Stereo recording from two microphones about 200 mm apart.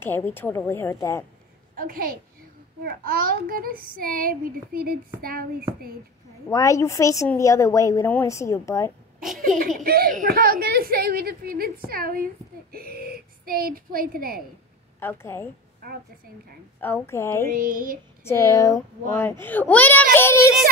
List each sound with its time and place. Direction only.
0.0 s a woman's voice: 10° left (ahead or behind)
1.8 s a child's voice: 50° right (ahead or behind)
6.5 s a woman's voice: 15° left (ahead or behind)
9.8 s a child's voice: 45° right (ahead or behind)
15.0 s a woman's voice: 10° left (ahead or behind)
16.8 s a woman's voice: 10° left (ahead or behind)
17.6 s a child's voice: 45° right (ahead or behind)
18.2 s a woman's voice: 15° left (ahead or behind)